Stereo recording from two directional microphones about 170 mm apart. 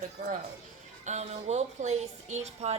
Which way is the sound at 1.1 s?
40° right (ahead or behind).